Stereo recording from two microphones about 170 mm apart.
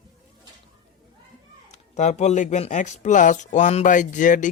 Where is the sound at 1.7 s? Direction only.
45° left (ahead or behind).